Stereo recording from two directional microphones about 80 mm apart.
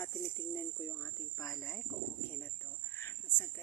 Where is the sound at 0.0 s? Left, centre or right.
Left.